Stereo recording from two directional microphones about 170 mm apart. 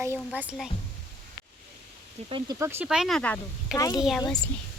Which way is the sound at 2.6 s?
15° right (ahead or behind).